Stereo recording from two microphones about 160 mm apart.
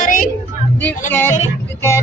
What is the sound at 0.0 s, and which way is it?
Music, 55° left (ahead or behind).